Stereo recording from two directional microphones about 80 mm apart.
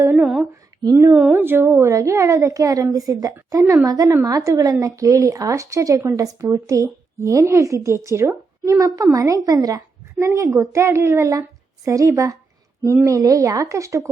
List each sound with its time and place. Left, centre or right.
0.0 s a sound: right
1.3 s a woman's voice: right
1.9 s a woman's voice: right
8.7 s a woman's voice: right